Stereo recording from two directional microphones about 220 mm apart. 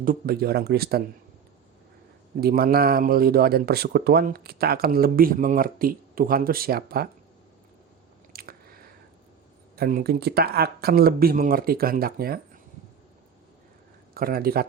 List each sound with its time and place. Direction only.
0.0 s speech: 40° right (ahead or behind)
2.4 s speech: 45° right (ahead or behind)
8.3 s biting: 40° right (ahead or behind)
9.7 s speech: 45° right (ahead or behind)
14.1 s speech: 40° right (ahead or behind)